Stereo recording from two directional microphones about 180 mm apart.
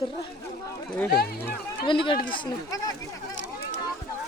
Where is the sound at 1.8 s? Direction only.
30° left (ahead or behind).